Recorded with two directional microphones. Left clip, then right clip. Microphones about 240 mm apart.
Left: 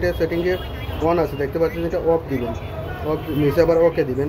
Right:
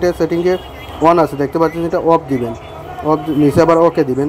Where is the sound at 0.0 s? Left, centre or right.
Right.